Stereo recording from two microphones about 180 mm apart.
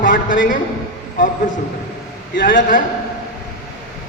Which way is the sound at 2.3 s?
50° left (ahead or behind).